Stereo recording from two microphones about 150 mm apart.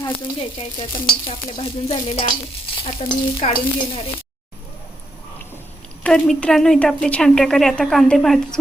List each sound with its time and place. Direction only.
0.3 s stir: 35° left (ahead or behind)
6.0 s a woman's voice: 5° left (ahead or behind)